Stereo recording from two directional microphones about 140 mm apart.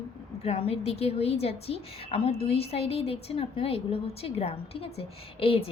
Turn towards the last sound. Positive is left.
turn(degrees=45)  # may be behind; listen again after turning